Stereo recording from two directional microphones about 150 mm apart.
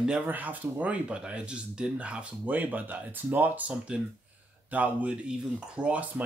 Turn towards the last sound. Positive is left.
turn(degrees=-10)  # may be behind; listen again after turning